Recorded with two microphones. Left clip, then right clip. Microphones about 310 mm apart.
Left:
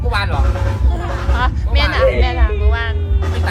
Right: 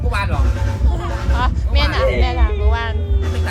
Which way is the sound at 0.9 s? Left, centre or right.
Centre.